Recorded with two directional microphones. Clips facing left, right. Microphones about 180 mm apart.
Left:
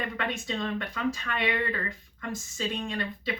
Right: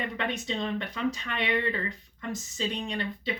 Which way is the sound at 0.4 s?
20° right (ahead or behind).